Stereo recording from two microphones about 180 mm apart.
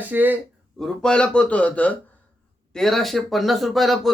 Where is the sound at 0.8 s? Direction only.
5° left (ahead or behind).